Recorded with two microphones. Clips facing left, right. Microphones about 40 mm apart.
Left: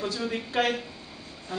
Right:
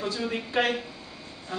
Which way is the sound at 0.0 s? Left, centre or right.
Centre.